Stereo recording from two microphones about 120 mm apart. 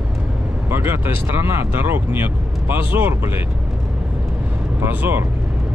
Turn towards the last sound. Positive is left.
turn(degrees=-15)  # may be behind; listen again after turning